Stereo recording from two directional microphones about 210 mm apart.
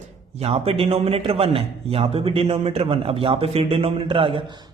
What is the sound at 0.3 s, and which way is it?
A man's voice, 30° right (ahead or behind).